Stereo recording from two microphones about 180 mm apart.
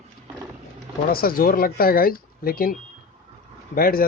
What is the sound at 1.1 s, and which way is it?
Speech, 55° left (ahead or behind).